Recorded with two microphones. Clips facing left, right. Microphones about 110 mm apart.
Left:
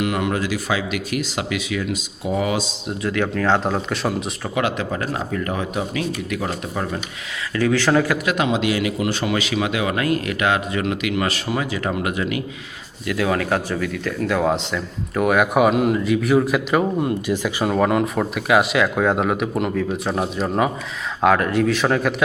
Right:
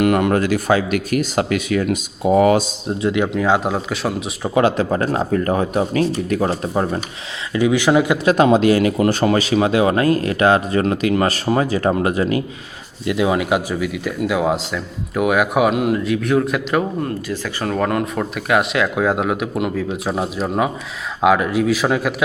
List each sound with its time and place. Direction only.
0.0 s speech: 50° right (ahead or behind)
3.0 s speech: 20° right (ahead or behind); by 4.4 s centre (ahead or behind)
4.5 s speech: 35° right (ahead or behind)
7.5 s speech: 15° right (ahead or behind)
8.2 s speech: 35° right (ahead or behind)
13.1 s speech: 20° right (ahead or behind); by 16.8 s centre (ahead or behind)
17.0 s speech: 15° left (ahead or behind); by 22.1 s 5° right (ahead or behind)